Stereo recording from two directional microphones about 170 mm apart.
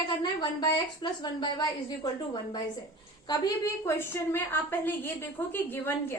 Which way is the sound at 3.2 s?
20° left (ahead or behind).